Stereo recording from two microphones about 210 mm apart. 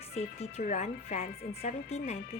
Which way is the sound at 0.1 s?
30° left (ahead or behind).